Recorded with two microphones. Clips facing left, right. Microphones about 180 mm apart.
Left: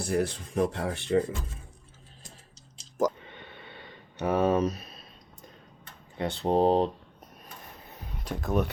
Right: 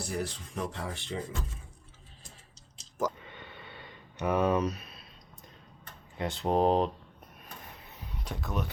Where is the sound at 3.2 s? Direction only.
25° left (ahead or behind).